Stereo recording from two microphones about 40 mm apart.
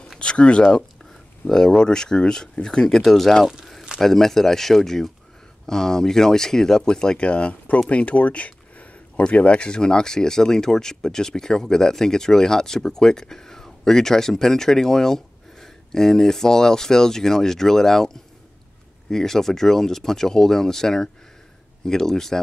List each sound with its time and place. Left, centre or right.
0.2 s speech: left
7.9 s a sound: left
9.3 s speech: left; by 22.4 s centre